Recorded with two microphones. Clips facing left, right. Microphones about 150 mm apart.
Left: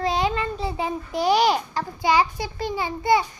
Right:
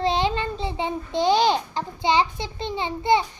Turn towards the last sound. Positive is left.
turn(degrees=-25)  # may be behind; listen again after turning